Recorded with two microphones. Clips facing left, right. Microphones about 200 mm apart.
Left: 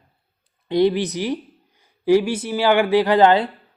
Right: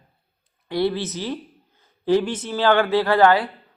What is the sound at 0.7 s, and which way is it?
Speech, 20° left (ahead or behind).